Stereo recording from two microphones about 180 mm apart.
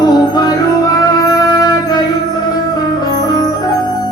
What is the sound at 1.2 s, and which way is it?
Shofar, 20° left (ahead or behind).